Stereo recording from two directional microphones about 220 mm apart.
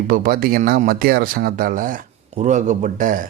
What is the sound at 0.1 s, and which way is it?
Speech, 40° right (ahead or behind).